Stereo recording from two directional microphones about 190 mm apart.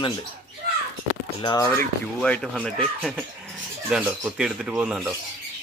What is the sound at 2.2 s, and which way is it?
Speech, 5° left (ahead or behind).